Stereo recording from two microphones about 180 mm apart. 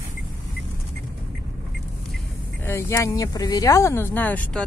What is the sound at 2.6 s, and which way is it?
Speech, 15° left (ahead or behind).